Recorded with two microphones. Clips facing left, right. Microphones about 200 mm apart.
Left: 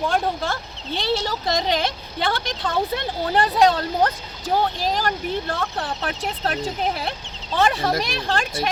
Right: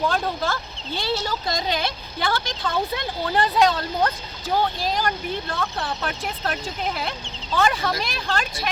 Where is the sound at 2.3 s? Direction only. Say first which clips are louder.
Even; 35° left (ahead or behind).